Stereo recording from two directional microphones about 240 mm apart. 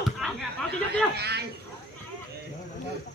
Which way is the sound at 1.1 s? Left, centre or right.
Right.